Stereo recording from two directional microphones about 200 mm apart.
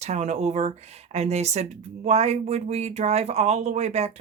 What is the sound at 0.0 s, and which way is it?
Speech, 35° right (ahead or behind).